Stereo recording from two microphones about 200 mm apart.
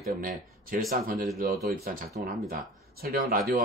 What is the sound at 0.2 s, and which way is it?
Speech, 45° right (ahead or behind).